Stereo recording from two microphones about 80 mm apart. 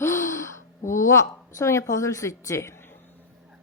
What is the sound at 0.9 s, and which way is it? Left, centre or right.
A woman's voice, left.